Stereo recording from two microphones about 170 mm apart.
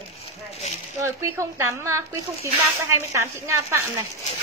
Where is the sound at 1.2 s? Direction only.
15° right (ahead or behind).